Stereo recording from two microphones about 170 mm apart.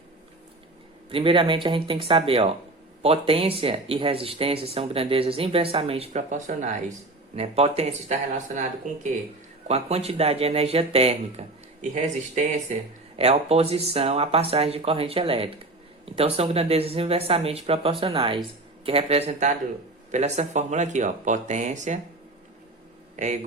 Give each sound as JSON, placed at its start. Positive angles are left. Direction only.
{"t": 1.1, "sound": "speech", "side_deg": -30}
{"t": 9.6, "sound": "speech", "side_deg": -40}
{"t": 13.1, "sound": "speech", "side_deg": -35}
{"t": 23.1, "sound": "speech", "side_deg": -45}